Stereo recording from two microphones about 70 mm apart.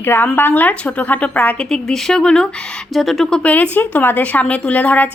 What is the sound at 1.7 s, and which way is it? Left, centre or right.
Speech, centre.